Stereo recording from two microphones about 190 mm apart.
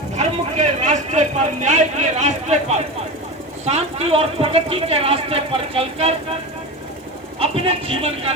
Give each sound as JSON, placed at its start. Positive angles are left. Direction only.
{"t": 0.2, "sound": "speech", "side_deg": -35}
{"t": 7.3, "sound": "speech", "side_deg": -30}